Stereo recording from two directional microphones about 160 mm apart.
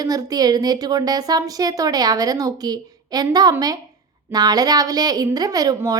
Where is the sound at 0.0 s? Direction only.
25° right (ahead or behind).